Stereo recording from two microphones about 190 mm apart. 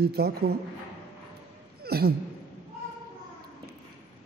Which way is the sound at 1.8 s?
55° right (ahead or behind).